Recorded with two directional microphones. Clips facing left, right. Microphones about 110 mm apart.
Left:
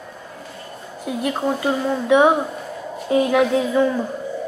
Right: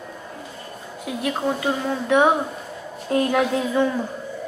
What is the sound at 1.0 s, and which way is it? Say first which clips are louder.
A woman's voice: left 2 dB; centre (ahead or behind).